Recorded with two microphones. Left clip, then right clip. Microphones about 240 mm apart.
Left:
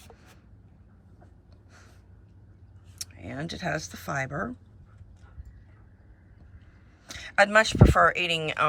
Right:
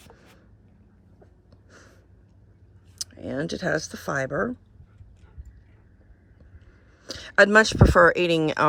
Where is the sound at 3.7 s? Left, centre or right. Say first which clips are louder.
Right 4 dB; centre.